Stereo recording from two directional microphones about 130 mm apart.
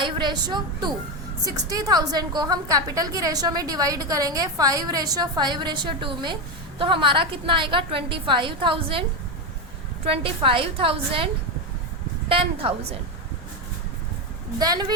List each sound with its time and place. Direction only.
0.0 s a woman's voice: 35° right (ahead or behind)
12.3 s a woman's voice: 45° right (ahead or behind)
14.6 s a woman's voice: 30° right (ahead or behind)